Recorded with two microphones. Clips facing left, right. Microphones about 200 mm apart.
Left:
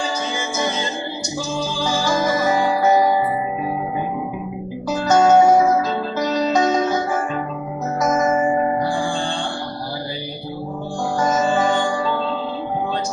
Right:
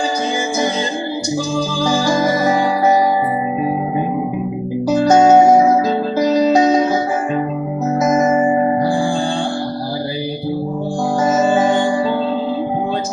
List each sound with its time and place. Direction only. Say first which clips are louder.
1.8 s music: right 5 dB; 35° right (ahead or behind)
4.9 s music: right 5 dB; 30° right (ahead or behind)
6.1 s music: right 6 dB; 10° right (ahead or behind)